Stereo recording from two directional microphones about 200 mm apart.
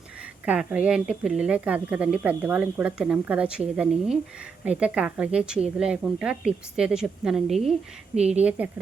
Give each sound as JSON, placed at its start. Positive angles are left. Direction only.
{"t": 0.4, "sound": "a woman's voice", "side_deg": -5}
{"t": 8.1, "sound": "speech", "side_deg": -35}
{"t": 8.4, "sound": "a woman's voice", "side_deg": -5}